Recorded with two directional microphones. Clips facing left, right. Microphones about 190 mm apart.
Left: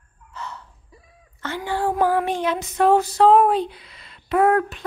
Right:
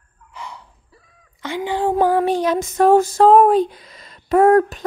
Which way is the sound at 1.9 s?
30° right (ahead or behind).